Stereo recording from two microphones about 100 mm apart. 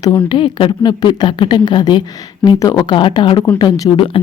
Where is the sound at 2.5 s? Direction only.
35° left (ahead or behind).